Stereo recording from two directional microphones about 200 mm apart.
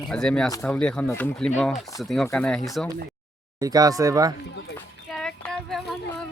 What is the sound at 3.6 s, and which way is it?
Speech, 20° right (ahead or behind).